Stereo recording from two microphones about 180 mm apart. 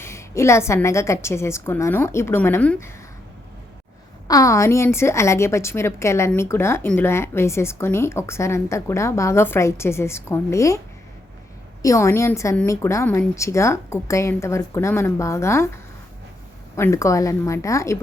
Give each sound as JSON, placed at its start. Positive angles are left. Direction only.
{"t": 0.0, "sound": "a woman's voice", "side_deg": 15}
{"t": 4.3, "sound": "a woman's voice", "side_deg": 20}
{"t": 11.8, "sound": "a woman's voice", "side_deg": 15}